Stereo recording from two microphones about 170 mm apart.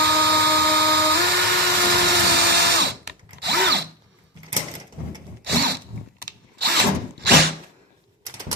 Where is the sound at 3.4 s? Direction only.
80° right.